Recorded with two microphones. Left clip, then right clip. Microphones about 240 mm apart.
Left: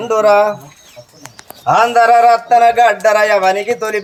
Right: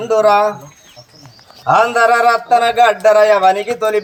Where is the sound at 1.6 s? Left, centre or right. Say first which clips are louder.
Left 1 dB; centre.